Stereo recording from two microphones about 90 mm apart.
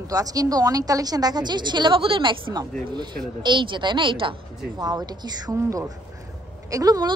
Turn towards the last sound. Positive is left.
turn(degrees=-40)  # may be behind; listen again after turning